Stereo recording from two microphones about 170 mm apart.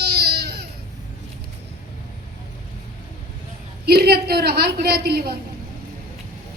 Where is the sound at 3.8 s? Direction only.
70° right (ahead or behind).